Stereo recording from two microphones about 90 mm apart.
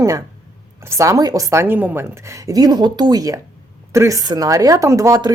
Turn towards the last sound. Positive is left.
turn(degrees=-35)  # may be behind; listen again after turning